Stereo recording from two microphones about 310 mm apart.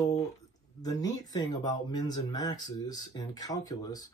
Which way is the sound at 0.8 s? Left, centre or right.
Centre.